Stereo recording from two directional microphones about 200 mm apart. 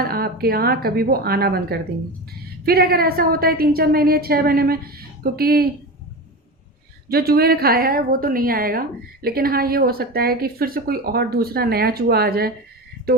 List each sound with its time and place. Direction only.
0.0 s a woman's voice: 50° right (ahead or behind)
7.1 s a woman's voice: 50° right (ahead or behind)